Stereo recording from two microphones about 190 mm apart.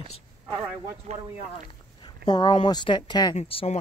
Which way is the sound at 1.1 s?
35° right (ahead or behind).